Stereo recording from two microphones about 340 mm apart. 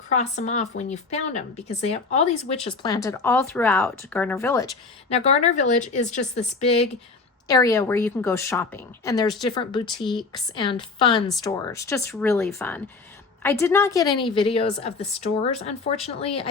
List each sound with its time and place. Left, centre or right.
0.1 s speech: centre